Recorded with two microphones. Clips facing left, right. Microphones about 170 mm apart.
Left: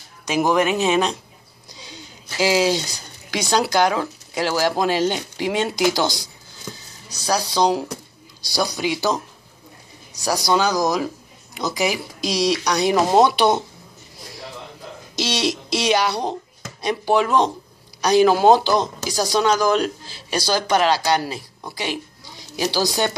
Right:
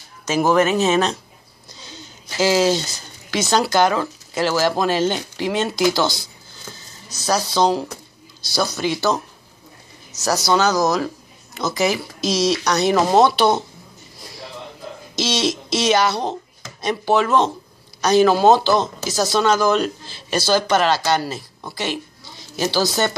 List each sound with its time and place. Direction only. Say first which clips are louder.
0.2 s speech: right 2 dB; 15° left (ahead or behind)
15.1 s speech: right 1 dB; 10° left (ahead or behind)